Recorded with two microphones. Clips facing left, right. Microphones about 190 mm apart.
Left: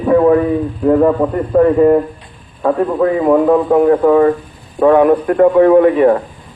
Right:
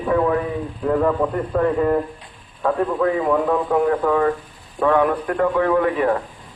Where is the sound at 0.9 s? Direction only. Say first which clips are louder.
Left 7 dB; 30° left (ahead or behind).